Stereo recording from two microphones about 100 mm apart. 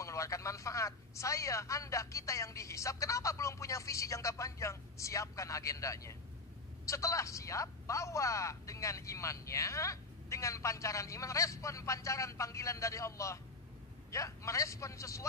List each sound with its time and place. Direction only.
0.0 s speech: 30° left (ahead or behind)